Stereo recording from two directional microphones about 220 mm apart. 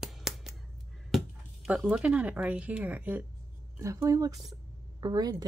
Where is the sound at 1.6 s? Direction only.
5° right (ahead or behind).